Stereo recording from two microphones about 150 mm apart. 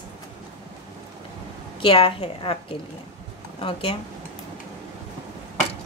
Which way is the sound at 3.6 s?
35° left (ahead or behind).